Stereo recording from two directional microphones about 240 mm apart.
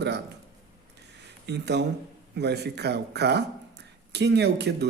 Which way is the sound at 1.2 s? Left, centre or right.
Right.